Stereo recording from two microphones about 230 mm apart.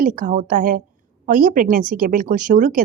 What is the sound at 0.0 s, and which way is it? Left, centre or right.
Speech, right.